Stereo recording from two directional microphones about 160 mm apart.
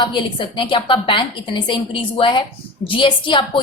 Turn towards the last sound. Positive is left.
turn(degrees=30)  # may be behind; listen again after turning